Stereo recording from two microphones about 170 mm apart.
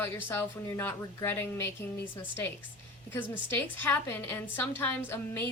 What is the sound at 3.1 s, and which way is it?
Speech, 15° left (ahead or behind).